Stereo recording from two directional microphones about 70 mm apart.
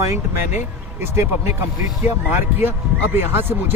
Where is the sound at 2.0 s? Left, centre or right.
Right.